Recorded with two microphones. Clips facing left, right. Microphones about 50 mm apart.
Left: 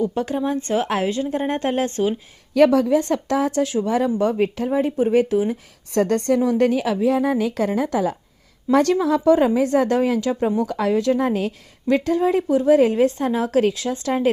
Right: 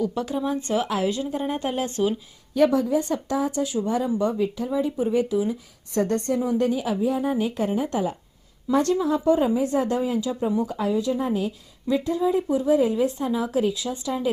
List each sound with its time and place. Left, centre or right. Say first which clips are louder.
0.0 s a woman's voice: left 3 dB; left
2.6 s a woman's voice: left 5 dB; left
5.9 s a woman's voice: left 5 dB; left